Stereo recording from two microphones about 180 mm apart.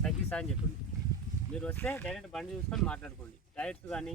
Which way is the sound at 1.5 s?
10° left (ahead or behind).